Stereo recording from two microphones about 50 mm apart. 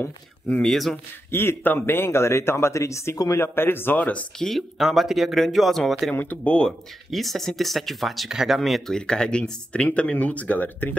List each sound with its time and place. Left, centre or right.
0.6 s speech: centre
1.3 s speech: left
2.0 s speech: left
3.9 s speech: left
4.6 s speech: centre
6.1 s speech: left
7.1 s speech: centre
8.3 s speech: centre
8.5 s speech: centre
8.9 s speech: centre; by 11.0 s left